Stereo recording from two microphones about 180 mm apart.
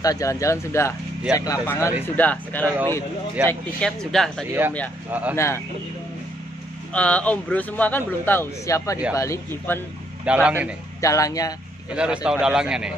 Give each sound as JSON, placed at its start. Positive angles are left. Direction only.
{"t": 0.0, "sound": "speech", "side_deg": 20}
{"t": 4.5, "sound": "a man's voice", "side_deg": -10}
{"t": 5.3, "sound": "speech", "side_deg": 15}
{"t": 6.9, "sound": "speech", "side_deg": 5}
{"t": 10.2, "sound": "a man's voice", "side_deg": -10}
{"t": 11.0, "sound": "speech", "side_deg": 20}
{"t": 11.9, "sound": "speech", "side_deg": -5}